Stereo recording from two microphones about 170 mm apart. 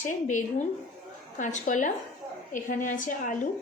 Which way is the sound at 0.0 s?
45° left (ahead or behind).